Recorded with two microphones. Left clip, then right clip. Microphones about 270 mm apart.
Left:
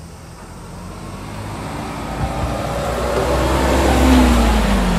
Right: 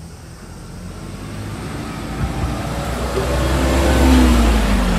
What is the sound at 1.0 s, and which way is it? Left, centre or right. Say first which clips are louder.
Vehicle: left 1 dB; left.